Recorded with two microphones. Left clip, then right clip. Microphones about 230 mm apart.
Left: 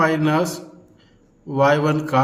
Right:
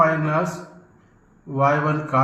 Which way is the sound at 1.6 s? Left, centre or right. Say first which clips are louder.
Left 1 dB; left.